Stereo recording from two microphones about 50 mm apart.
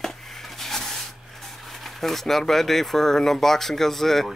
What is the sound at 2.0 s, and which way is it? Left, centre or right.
Speech, centre.